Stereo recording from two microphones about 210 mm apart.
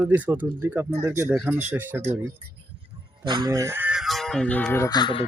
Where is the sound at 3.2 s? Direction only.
20° right (ahead or behind).